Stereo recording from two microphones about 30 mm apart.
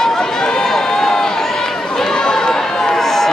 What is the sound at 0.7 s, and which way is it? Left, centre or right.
Run, centre.